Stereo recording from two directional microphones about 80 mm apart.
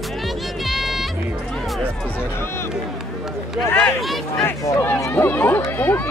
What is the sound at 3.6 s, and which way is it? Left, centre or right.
Speech, left.